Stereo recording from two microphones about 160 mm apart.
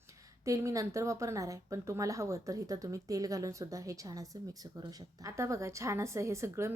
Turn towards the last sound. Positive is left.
turn(degrees=-15)  # may be behind; listen again after turning